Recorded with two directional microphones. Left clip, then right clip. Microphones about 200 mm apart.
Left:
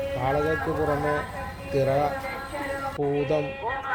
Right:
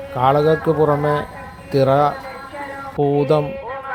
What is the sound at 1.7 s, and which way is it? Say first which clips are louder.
Speech: right 9 dB; 35° right (ahead or behind).